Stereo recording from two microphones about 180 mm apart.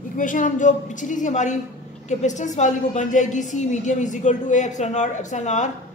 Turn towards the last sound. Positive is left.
turn(degrees=40)  # may be behind; listen again after turning